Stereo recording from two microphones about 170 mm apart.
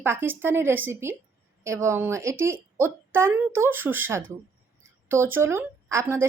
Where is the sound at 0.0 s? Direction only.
15° right (ahead or behind).